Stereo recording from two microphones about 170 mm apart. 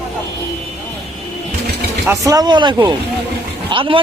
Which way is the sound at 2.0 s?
15° right (ahead or behind).